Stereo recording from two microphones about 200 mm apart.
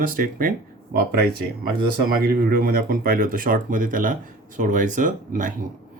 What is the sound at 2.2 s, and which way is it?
Speech, 50° right (ahead or behind).